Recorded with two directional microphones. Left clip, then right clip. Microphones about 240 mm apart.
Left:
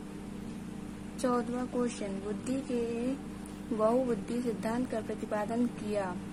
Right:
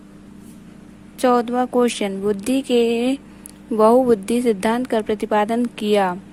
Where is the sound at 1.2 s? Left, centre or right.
Right.